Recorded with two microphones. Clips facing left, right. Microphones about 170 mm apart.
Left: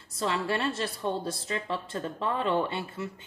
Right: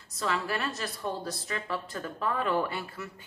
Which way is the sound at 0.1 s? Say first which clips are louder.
Left 2 dB; 30° left (ahead or behind).